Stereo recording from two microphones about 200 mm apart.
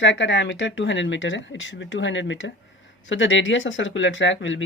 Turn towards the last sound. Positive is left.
turn(degrees=70)  # may be behind; listen again after turning